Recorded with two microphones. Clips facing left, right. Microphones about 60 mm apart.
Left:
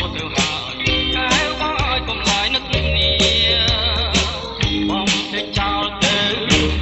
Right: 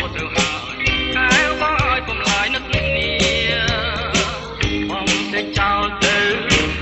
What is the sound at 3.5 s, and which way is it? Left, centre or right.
Music, right.